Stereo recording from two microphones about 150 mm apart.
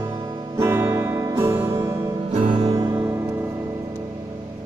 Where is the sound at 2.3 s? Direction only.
50° right (ahead or behind).